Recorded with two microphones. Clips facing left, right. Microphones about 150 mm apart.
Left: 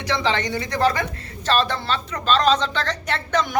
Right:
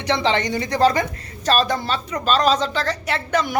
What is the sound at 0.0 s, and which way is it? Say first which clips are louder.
A woman's voice: right 3 dB; 20° right (ahead or behind).